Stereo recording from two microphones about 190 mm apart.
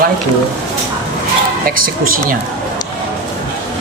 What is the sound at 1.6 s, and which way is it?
Speech, 50° right (ahead or behind).